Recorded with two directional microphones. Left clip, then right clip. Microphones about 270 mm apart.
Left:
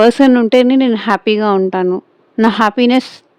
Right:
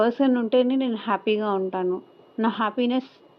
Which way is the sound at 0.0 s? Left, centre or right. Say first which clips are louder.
Left 12 dB; left.